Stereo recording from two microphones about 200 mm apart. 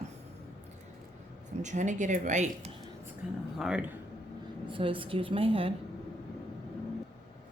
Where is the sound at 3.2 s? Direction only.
5° right (ahead or behind).